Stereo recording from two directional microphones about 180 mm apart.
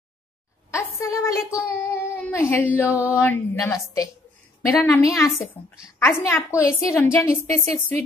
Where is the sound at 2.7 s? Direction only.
10° left (ahead or behind).